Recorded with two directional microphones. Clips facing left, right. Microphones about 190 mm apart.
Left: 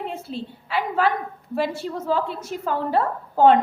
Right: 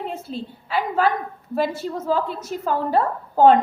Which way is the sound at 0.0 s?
40° right (ahead or behind).